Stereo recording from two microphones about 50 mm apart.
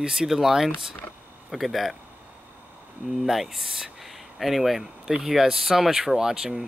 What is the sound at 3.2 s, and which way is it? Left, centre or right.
Speech, centre.